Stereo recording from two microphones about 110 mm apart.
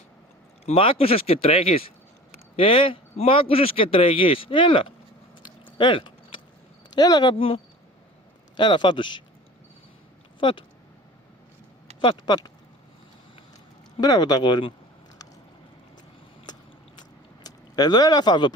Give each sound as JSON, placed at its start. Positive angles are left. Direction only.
{"t": 0.6, "sound": "speech", "side_deg": 65}
{"t": 5.4, "sound": "a sound", "side_deg": 50}
{"t": 6.9, "sound": "speech", "side_deg": 40}
{"t": 7.3, "sound": "speech", "side_deg": 60}
{"t": 8.5, "sound": "a man's voice", "side_deg": 45}
{"t": 11.9, "sound": "a man's voice", "side_deg": 45}
{"t": 14.0, "sound": "speech", "side_deg": 40}
{"t": 17.0, "sound": "a sound", "side_deg": 40}